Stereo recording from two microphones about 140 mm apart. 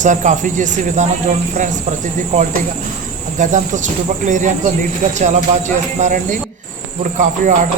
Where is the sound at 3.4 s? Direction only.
60° right (ahead or behind).